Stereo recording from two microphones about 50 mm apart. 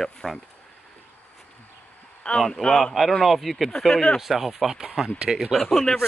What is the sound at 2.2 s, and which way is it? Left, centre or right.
Speech, centre.